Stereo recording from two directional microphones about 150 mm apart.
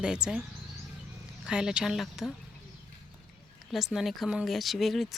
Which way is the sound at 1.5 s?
5° right (ahead or behind).